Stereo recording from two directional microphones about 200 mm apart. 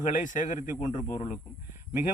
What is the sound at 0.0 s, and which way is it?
A man's voice, 40° left (ahead or behind).